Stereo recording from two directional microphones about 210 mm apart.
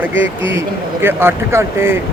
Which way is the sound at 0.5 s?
10° right (ahead or behind).